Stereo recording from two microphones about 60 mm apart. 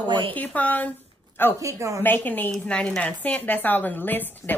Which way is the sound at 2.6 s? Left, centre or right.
Centre.